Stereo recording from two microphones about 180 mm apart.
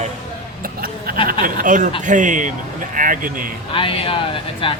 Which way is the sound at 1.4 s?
50° right (ahead or behind).